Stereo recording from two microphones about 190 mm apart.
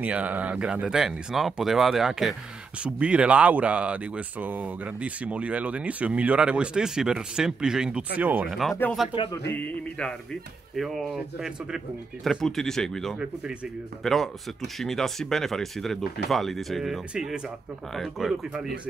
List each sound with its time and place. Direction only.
0.0 s speech: 10° right (ahead or behind)
9.1 s speech: 25° left (ahead or behind)
9.5 s music: 10° left (ahead or behind)
11.3 s speech: 5° right (ahead or behind)